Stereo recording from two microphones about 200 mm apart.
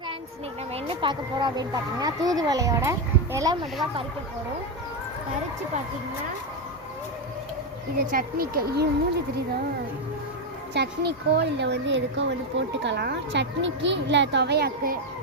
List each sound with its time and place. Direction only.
0.7 s speech: 25° right (ahead or behind)
7.9 s speech: 45° right (ahead or behind)
10.8 s speech: 55° right (ahead or behind)